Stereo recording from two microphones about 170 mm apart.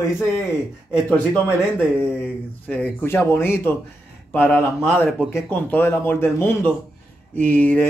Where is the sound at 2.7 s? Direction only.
10° left (ahead or behind).